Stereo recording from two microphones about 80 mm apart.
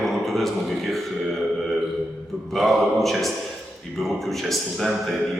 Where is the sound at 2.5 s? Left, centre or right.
Centre.